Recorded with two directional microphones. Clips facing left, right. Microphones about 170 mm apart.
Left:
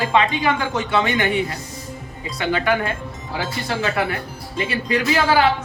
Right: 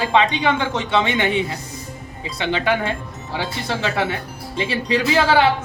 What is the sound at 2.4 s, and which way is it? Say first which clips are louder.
Speech: even; 25° right (ahead or behind).